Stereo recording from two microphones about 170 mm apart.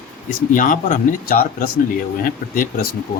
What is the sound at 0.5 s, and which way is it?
Speech, 55° left (ahead or behind).